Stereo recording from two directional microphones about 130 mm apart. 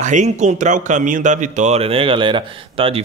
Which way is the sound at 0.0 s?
65° right (ahead or behind).